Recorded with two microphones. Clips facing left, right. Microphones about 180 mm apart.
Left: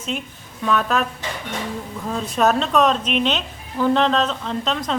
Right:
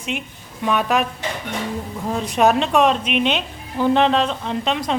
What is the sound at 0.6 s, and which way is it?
Speech, 15° right (ahead or behind).